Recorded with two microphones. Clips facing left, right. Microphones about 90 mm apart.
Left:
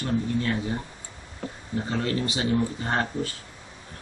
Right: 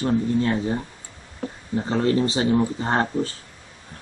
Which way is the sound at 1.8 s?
30° right (ahead or behind).